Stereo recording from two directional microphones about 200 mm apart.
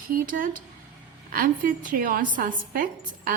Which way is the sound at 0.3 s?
45° right (ahead or behind).